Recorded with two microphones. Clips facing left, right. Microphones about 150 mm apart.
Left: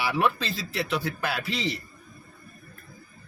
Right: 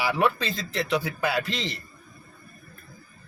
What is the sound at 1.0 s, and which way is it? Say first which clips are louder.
Speech: right 3 dB; 5° right (ahead or behind).